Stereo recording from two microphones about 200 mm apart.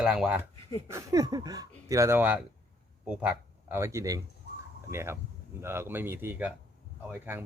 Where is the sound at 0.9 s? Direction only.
15° right (ahead or behind).